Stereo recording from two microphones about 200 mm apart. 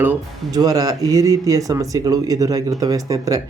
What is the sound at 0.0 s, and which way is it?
Speech, 15° right (ahead or behind).